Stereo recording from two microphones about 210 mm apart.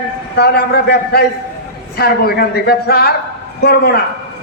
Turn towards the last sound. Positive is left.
turn(degrees=50)  # may be behind; listen again after turning